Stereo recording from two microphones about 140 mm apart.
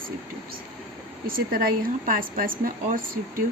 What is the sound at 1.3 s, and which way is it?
Speech, 90° right.